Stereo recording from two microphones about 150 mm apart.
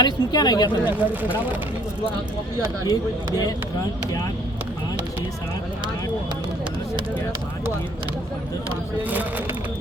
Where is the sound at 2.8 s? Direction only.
25° left (ahead or behind).